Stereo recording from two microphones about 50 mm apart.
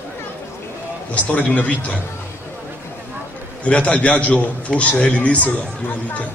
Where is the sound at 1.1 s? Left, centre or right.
Left.